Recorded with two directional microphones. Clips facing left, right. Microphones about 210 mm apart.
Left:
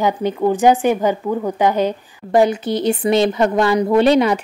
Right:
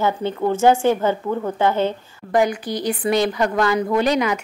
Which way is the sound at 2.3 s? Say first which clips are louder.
Left 4 dB; 25° left (ahead or behind).